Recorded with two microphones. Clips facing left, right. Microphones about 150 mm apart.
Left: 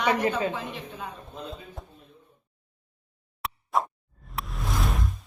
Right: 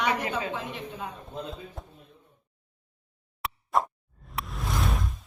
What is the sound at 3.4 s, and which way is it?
Plop, centre (ahead or behind).